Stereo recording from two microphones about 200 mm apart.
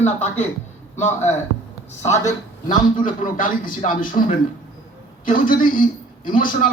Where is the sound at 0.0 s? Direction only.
35° left (ahead or behind).